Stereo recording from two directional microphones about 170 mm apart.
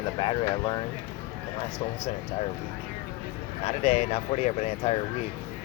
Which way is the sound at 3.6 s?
35° left (ahead or behind).